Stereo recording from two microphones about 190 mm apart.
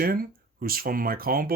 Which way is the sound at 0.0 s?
50° right (ahead or behind).